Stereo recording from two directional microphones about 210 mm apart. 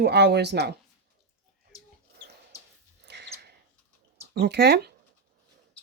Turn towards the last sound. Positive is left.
turn(degrees=-50)  # may be behind; listen again after turning